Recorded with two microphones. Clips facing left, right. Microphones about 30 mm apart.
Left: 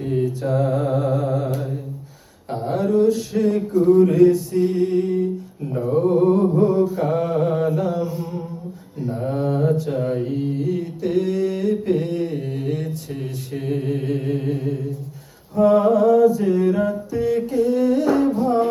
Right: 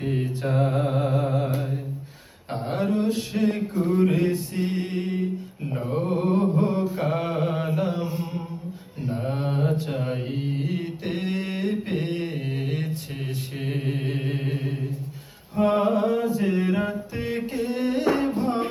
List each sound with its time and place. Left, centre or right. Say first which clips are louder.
0.0 s music: left 5 dB; right
2.5 s a sound: left 4 dB; right
2.8 s male singing: left 8 dB; right
5.7 s mantra: left 8 dB; right
7.7 s mantra: left 4 dB; right
9.0 s mantra: left 5 dB; right
13.5 s a sound: left 7 dB; right
15.5 s music: left 6 dB; right